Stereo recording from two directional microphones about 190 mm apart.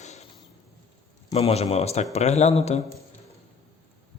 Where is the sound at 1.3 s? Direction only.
30° left (ahead or behind).